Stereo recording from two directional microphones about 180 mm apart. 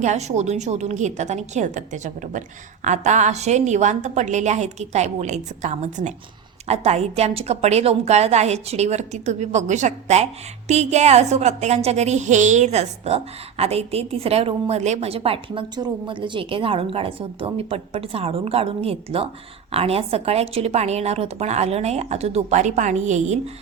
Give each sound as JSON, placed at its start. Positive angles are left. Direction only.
{"t": 0.0, "sound": "a woman's voice", "side_deg": -40}